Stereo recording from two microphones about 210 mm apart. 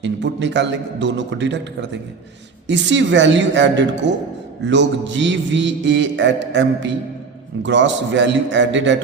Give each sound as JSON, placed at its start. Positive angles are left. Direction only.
{"t": 0.0, "sound": "mantra", "side_deg": -55}